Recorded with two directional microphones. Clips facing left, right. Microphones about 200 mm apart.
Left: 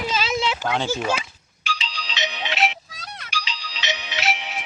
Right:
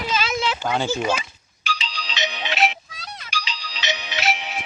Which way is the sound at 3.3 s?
45° right (ahead or behind).